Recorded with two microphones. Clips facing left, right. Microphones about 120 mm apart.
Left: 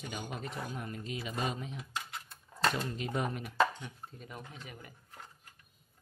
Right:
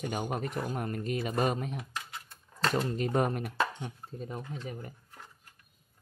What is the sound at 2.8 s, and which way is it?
Speech, 45° right (ahead or behind).